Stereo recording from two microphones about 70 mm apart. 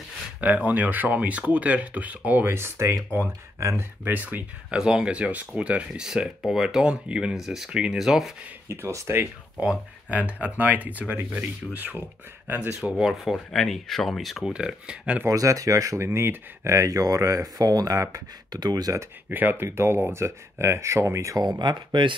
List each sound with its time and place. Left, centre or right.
0.4 s speech: right
2.5 s speech: right
4.6 s speech: centre
6.0 s speech: centre
7.3 s speech: centre
8.6 s speech: right
9.6 s speech: centre
12.9 s speech: centre
14.4 s speech: centre
15.2 s speech: right
18.5 s speech: right
19.2 s speech: right
21.5 s speech: right